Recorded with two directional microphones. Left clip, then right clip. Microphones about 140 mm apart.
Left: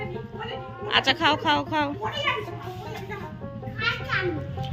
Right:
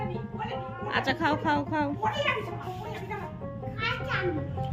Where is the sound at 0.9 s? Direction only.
5° right (ahead or behind).